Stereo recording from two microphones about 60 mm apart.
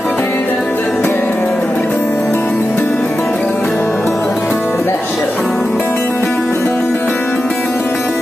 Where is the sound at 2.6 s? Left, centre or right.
Left.